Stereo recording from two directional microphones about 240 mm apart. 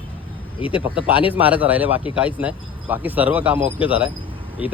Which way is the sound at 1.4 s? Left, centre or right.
Centre.